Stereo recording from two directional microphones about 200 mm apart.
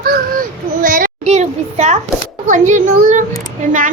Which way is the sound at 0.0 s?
45° right (ahead or behind).